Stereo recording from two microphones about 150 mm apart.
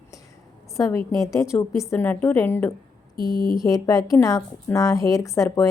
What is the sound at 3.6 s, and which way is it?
A woman's voice, 25° left (ahead or behind).